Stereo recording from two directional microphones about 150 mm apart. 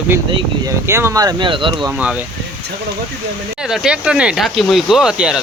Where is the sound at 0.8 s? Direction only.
15° right (ahead or behind); by 1.9 s 35° right (ahead or behind).